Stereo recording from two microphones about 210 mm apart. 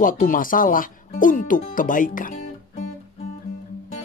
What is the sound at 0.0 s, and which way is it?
Speech, 40° left (ahead or behind).